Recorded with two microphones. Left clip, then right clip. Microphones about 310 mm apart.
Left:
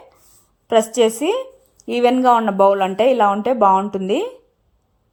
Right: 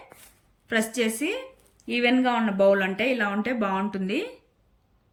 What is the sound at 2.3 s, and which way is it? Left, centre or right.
Speech, left.